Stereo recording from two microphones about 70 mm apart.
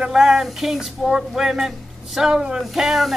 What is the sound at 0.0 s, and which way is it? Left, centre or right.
Speech, centre.